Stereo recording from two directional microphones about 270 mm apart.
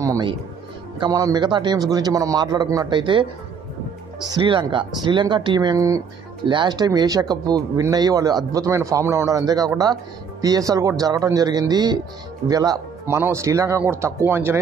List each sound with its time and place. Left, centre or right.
0.0 s music: centre
0.9 s speech: centre